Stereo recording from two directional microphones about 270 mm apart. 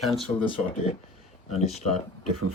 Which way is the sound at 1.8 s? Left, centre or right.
Left.